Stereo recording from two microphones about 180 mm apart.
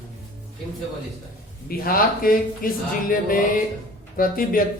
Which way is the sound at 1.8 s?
55° left (ahead or behind).